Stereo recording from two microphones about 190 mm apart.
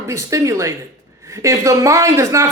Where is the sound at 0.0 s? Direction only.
15° right (ahead or behind).